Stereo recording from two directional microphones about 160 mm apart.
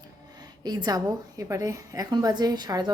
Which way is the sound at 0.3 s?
25° right (ahead or behind).